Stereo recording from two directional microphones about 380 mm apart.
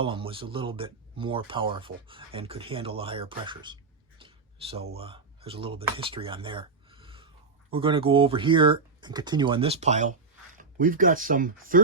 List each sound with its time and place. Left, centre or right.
0.0 s speech: centre
4.2 s a sound: centre
7.7 s speech: centre